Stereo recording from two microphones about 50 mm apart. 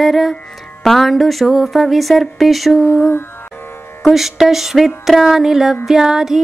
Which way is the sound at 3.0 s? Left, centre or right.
Left.